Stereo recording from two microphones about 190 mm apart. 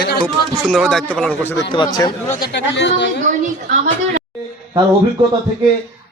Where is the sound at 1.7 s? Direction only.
20° left (ahead or behind).